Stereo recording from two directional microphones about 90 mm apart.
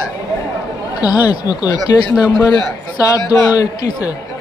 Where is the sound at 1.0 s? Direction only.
45° left (ahead or behind).